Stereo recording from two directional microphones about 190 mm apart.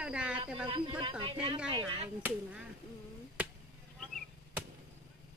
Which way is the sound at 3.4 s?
10° right (ahead or behind).